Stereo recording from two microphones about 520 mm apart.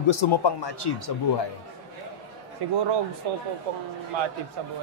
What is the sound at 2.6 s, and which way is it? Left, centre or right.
Speech, right.